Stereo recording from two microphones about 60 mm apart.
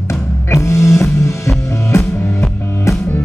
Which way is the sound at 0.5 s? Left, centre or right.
Left.